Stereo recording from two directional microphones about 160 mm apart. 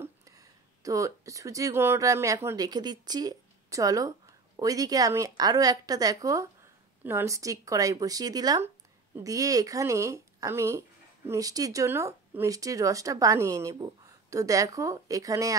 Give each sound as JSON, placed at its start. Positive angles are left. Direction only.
{"t": 0.0, "sound": "speech", "side_deg": -20}